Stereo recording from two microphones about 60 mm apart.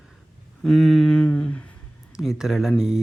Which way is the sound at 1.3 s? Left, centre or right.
Left.